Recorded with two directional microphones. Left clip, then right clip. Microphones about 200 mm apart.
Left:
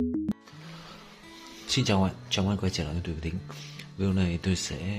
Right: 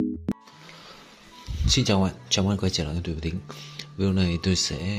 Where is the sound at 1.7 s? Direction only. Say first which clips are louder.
Right 4 dB; 10° right (ahead or behind).